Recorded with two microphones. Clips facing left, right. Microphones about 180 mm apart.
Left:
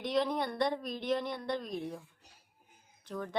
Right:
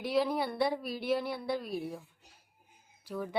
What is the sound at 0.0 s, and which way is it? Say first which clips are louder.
Speech: right 1 dB; 5° right (ahead or behind).